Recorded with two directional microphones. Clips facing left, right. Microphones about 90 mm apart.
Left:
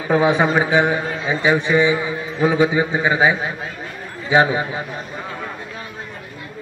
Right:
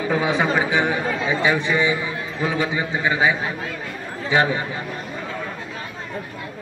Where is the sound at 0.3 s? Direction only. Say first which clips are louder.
Left 4 dB; 20° left (ahead or behind).